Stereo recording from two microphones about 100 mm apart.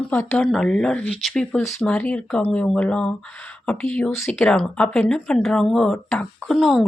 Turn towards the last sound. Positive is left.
turn(degrees=0)  # may be behind; listen again after turning